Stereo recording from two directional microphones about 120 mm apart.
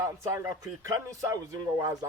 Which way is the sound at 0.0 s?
25° right (ahead or behind).